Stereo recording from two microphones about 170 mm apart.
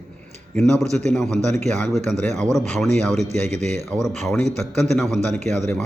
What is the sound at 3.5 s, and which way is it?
Speech, 45° right (ahead or behind).